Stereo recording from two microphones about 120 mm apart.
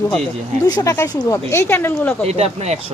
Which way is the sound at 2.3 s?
60° right (ahead or behind).